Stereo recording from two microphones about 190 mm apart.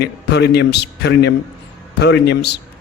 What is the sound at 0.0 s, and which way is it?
A man's voice, 60° left (ahead or behind).